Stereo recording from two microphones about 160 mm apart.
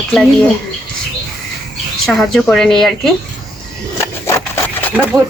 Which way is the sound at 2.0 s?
Centre (ahead or behind).